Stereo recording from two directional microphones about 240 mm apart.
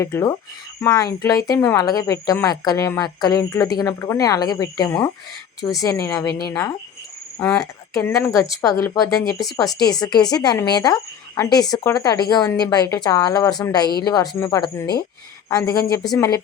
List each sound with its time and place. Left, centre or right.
0.0 s speech: centre